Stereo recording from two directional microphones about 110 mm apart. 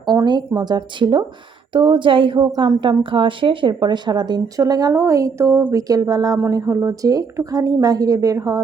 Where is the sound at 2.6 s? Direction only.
35° right (ahead or behind).